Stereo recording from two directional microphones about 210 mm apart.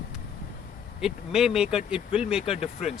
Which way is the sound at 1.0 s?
Centre (ahead or behind).